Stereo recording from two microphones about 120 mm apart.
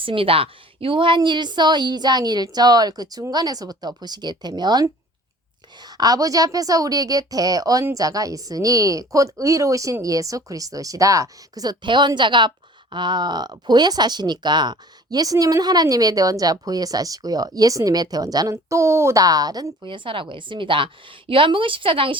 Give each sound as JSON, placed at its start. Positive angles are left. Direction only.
{"t": 0.0, "sound": "a woman's voice", "side_deg": -50}